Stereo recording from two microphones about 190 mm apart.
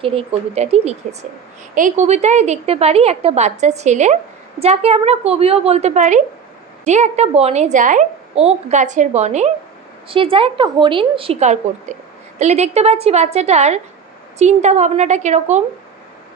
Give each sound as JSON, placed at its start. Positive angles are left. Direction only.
{"t": 0.0, "sound": "a woman's voice", "side_deg": -30}